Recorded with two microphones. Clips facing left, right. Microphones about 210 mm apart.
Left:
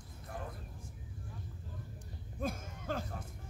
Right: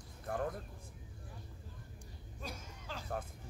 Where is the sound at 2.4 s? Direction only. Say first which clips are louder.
Left 9 dB; 50° left (ahead or behind).